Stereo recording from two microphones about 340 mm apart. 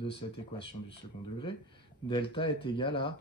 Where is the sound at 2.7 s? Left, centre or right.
Centre.